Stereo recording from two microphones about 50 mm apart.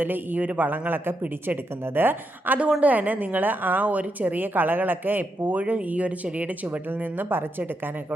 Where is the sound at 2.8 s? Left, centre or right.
Right.